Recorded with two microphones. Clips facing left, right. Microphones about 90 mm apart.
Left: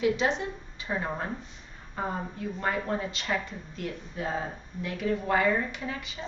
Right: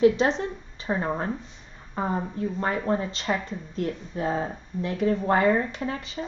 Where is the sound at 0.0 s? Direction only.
35° right (ahead or behind).